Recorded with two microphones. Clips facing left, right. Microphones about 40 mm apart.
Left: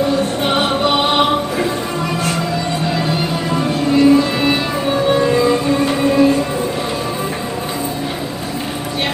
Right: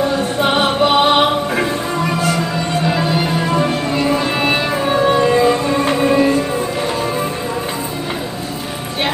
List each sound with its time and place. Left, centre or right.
0.4 s music: centre
3.5 s music: centre